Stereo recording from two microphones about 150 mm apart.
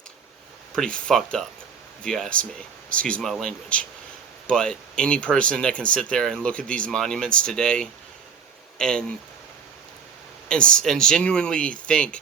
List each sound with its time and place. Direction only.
0.8 s speech: 5° left (ahead or behind)
10.5 s speech: 5° left (ahead or behind)